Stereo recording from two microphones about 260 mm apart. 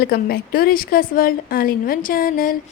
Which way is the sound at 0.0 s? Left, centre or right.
Left.